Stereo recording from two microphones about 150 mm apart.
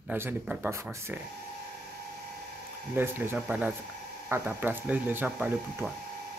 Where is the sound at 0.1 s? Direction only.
10° right (ahead or behind).